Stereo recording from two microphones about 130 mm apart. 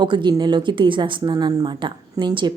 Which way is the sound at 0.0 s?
35° right (ahead or behind).